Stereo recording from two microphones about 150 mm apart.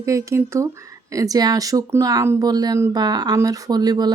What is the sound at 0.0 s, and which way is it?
Speech, 20° right (ahead or behind).